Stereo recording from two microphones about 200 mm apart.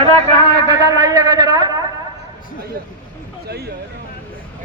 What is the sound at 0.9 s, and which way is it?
Speech, 20° right (ahead or behind).